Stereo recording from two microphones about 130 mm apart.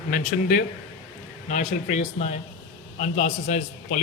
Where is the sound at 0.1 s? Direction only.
75° left (ahead or behind).